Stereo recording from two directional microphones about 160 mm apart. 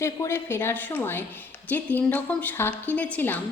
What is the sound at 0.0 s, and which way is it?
A woman's voice, 15° left (ahead or behind).